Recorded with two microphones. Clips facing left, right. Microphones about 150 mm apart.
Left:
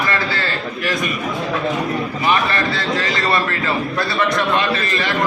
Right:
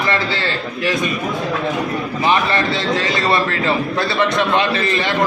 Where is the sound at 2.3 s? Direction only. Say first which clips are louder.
Right 2 dB; 25° right (ahead or behind).